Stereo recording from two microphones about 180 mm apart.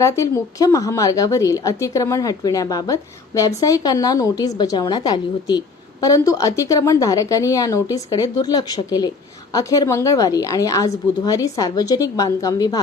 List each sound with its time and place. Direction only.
0.0 s a woman's voice: 15° left (ahead or behind)